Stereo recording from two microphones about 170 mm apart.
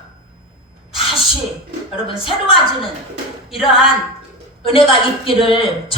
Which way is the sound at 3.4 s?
Centre (ahead or behind).